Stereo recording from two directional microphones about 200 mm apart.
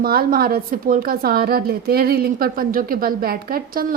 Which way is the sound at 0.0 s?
50° right (ahead or behind).